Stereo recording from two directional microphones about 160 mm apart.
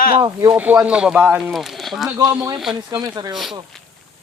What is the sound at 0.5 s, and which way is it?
Speech, 10° right (ahead or behind).